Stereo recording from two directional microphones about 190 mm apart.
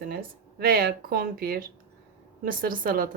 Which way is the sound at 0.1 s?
50° right (ahead or behind).